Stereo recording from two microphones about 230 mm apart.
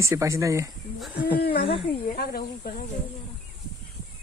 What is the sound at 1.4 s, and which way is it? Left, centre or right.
Speech, left.